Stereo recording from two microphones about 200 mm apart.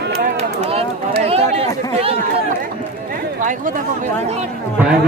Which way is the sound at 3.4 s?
40° right (ahead or behind).